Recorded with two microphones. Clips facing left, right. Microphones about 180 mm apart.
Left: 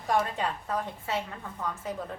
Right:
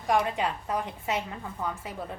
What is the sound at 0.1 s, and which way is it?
A woman's voice, 15° right (ahead or behind).